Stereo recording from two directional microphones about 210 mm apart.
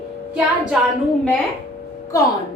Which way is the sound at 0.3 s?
5° right (ahead or behind).